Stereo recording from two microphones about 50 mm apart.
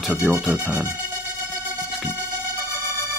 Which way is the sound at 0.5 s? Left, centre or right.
Right.